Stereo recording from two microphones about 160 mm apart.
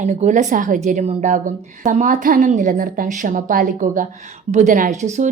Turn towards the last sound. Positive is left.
turn(degrees=-50)  # may be behind; listen again after turning